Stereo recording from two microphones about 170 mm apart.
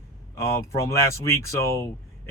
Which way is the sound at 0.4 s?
15° left (ahead or behind).